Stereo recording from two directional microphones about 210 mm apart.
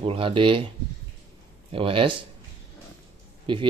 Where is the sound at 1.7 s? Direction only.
25° right (ahead or behind).